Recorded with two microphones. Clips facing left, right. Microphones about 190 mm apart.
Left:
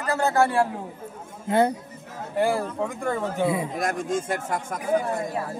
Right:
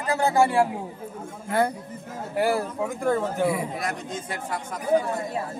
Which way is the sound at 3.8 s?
45° left (ahead or behind).